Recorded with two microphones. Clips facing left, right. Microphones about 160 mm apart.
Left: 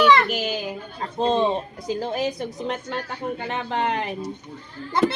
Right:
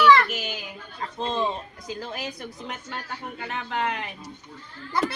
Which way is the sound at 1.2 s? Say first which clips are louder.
Left 7 dB; 30° left (ahead or behind).